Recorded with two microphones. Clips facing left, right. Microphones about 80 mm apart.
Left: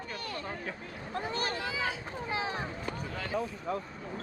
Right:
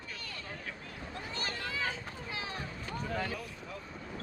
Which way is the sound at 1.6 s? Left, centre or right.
Centre.